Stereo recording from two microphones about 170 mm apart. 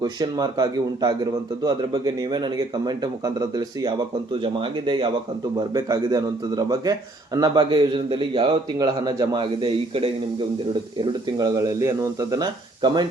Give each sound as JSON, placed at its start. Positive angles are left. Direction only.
{"t": 0.0, "sound": "a man's voice", "side_deg": -25}
{"t": 4.9, "sound": "a man's voice", "side_deg": -30}
{"t": 11.0, "sound": "a man's voice", "side_deg": -20}